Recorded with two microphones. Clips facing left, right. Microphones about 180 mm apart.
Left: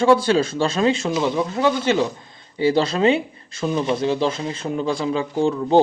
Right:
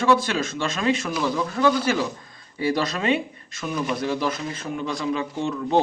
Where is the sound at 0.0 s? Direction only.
30° left (ahead or behind).